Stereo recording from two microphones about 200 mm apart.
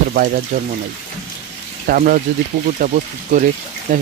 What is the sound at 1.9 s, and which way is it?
Speech, 45° right (ahead or behind).